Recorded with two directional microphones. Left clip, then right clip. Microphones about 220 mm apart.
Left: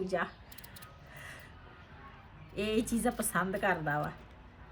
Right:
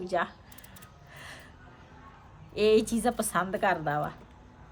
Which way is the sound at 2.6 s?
20° right (ahead or behind).